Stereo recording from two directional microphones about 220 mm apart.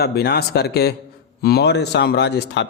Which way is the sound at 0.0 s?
45° left (ahead or behind).